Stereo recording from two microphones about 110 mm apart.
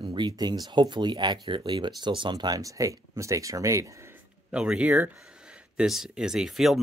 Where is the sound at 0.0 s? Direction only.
45° right (ahead or behind).